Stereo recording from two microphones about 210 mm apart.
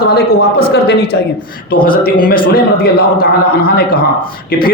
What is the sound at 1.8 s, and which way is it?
A man's voice, 45° left (ahead or behind).